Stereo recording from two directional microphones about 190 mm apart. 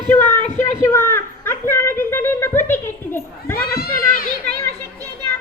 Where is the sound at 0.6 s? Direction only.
15° left (ahead or behind).